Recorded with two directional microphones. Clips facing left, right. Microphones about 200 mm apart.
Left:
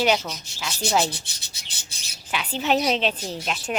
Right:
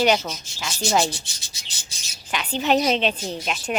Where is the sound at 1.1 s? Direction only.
60° left (ahead or behind).